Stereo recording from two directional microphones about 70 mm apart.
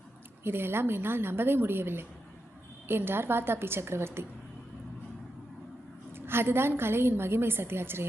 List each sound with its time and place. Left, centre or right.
0.4 s a woman's voice: right
6.1 s a woman's voice: right